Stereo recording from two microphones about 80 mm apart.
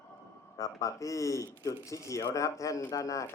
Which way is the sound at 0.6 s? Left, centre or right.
Left.